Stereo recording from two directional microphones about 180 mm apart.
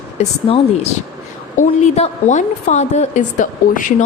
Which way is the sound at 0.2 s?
35° left (ahead or behind).